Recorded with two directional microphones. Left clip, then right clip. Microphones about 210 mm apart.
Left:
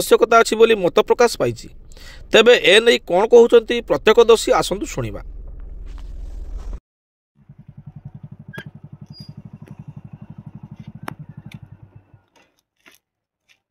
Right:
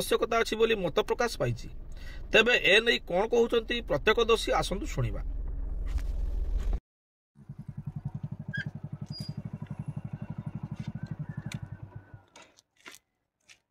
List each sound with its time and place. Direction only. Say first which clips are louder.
0.0 s speech: left 14 dB; 50° left (ahead or behind)
8.0 s vehicle: even; 45° left (ahead or behind)
12.4 s a sound: right 3 dB; 40° left (ahead or behind)